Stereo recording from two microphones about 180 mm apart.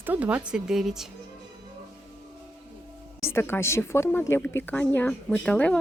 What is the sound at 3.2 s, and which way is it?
Speech, 15° left (ahead or behind).